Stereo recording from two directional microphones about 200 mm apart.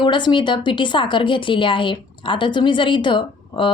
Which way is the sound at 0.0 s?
25° left (ahead or behind).